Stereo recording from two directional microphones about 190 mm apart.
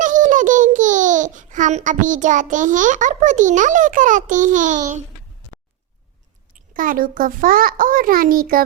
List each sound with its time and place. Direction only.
0.0 s a child's voice: 40° right (ahead or behind)
6.7 s a child's voice: 45° right (ahead or behind)